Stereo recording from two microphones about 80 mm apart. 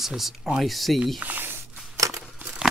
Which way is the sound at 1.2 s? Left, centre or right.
Right.